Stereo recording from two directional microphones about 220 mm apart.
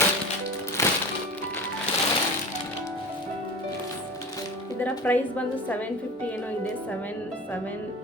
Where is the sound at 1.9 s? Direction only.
25° left (ahead or behind).